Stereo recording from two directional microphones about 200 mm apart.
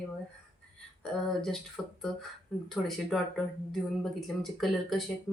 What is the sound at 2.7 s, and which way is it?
Speech, centre (ahead or behind).